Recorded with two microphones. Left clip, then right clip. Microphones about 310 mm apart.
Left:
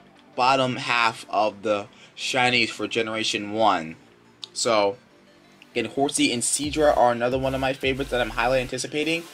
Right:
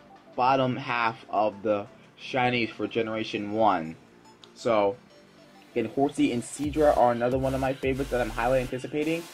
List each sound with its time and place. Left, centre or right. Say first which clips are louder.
0.4 s speech: left 3 dB; centre
6.1 s speech: left 4 dB; centre